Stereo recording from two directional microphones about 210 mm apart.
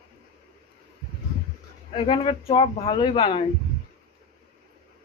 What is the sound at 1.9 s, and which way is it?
Speech, 25° left (ahead or behind).